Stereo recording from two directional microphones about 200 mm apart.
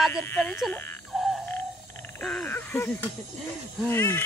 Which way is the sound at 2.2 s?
5° left (ahead or behind).